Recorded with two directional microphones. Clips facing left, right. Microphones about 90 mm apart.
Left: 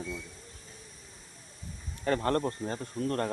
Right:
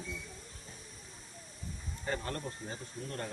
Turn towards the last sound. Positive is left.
turn(degrees=55)  # may be behind; listen again after turning